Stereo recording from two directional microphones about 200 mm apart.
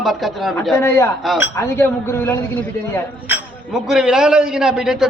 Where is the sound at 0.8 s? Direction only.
15° left (ahead or behind).